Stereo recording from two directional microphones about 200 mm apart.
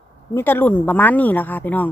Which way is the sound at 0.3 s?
10° left (ahead or behind).